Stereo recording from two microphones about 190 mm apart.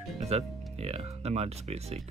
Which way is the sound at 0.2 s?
35° right (ahead or behind).